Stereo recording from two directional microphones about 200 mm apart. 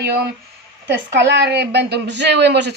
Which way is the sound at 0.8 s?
60° right (ahead or behind).